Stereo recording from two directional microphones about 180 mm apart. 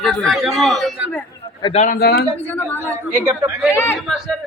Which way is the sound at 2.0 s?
60° left (ahead or behind).